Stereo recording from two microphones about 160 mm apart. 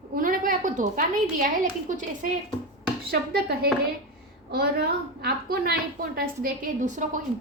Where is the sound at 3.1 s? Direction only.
75° right (ahead or behind).